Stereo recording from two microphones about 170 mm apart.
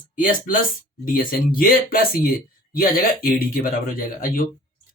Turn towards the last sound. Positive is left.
turn(degrees=55)  # may be behind; listen again after turning